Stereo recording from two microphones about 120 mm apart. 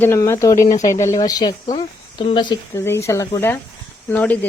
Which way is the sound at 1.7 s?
45° left (ahead or behind).